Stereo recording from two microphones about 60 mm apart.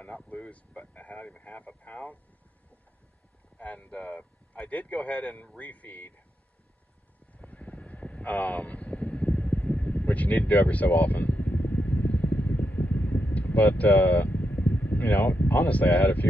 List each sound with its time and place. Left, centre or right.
0.0 s speech: left
3.5 s speech: left
7.3 s vehicle: left